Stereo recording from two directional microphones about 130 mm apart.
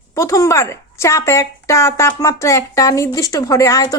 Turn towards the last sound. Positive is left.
turn(degrees=25)  # may be behind; listen again after turning